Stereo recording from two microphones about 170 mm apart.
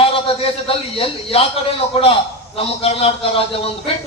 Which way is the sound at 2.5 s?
35° left (ahead or behind).